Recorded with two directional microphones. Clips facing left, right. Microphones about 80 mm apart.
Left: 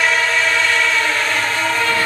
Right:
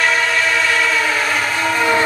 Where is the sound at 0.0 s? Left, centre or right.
Centre.